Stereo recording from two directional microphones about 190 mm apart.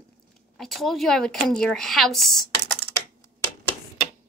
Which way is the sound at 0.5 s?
Centre (ahead or behind).